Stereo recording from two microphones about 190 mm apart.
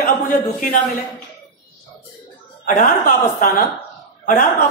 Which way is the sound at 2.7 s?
45° left (ahead or behind).